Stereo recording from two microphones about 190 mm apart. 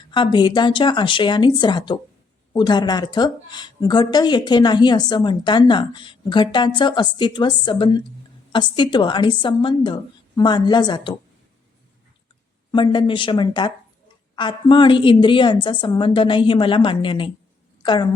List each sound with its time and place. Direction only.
0.1 s a woman's voice: 25° left (ahead or behind)
12.7 s a woman's voice: 25° left (ahead or behind)